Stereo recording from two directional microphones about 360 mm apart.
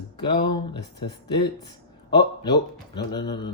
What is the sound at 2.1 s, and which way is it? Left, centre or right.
Speech, centre.